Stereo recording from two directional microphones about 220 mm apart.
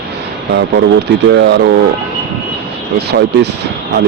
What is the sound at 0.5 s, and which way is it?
Speech, 50° right (ahead or behind).